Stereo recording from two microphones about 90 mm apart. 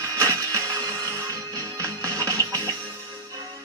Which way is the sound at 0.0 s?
35° right (ahead or behind).